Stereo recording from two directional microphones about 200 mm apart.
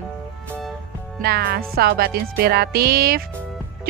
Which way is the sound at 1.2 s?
50° right (ahead or behind).